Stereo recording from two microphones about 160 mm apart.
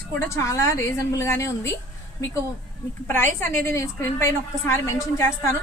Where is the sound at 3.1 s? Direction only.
15° left (ahead or behind).